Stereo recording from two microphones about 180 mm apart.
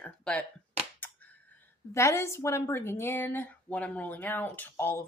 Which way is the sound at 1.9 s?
15° left (ahead or behind).